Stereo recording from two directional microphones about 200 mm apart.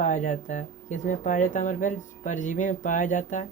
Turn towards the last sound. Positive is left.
turn(degrees=40)  # may be behind; listen again after turning